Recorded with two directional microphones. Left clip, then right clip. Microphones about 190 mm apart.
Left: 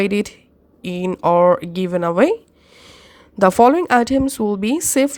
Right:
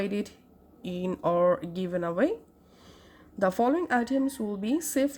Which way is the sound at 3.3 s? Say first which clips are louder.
Left 13 dB; 50° left (ahead or behind).